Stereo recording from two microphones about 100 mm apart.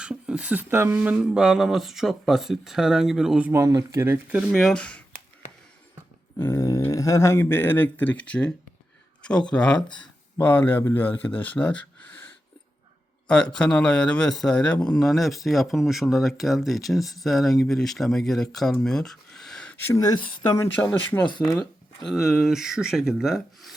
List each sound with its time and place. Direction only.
0.0 s a sound: 10° right (ahead or behind)
0.7 s speech: 25° right (ahead or behind)
0.9 s speech: 10° right (ahead or behind)
3.5 s speech: 35° right (ahead or behind)
4.3 s speech: 10° right (ahead or behind)
4.5 s a man's voice: 5° left (ahead or behind)
6.4 s a sound: 30° left (ahead or behind)
6.9 s a man's voice: 30° left (ahead or behind); by 11.8 s 10° left (ahead or behind)
13.2 s a man's voice: 10° left (ahead or behind)
18.5 s a sound: 5° left (ahead or behind)
19.9 s speech: 40° left (ahead or behind)
20.8 s a man's voice: 15° left (ahead or behind)
22.0 s speech: centre (ahead or behind)